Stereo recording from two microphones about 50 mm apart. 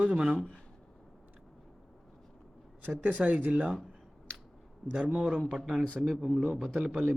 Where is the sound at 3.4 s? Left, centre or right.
Right.